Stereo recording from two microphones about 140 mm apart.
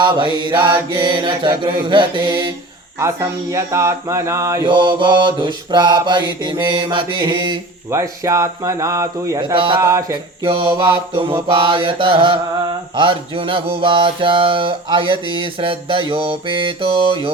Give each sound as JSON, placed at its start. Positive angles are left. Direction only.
{"t": 0.0, "sound": "mantra", "side_deg": -35}
{"t": 3.0, "sound": "speech", "side_deg": -20}
{"t": 4.6, "sound": "mantra", "side_deg": -35}
{"t": 7.9, "sound": "speech", "side_deg": -20}
{"t": 10.4, "sound": "mantra", "side_deg": -40}